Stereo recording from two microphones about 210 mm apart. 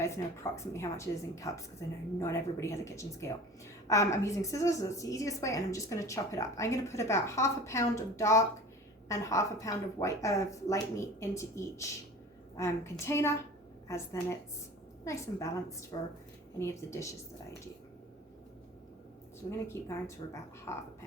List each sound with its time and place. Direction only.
0.5 s a woman's voice: 15° left (ahead or behind)
19.5 s a woman's voice: 15° left (ahead or behind)